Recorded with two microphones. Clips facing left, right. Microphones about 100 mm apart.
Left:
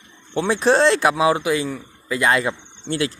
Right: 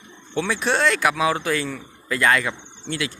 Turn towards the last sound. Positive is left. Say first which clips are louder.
# left 5 dB
turn(degrees=35)  # may be behind; listen again after turning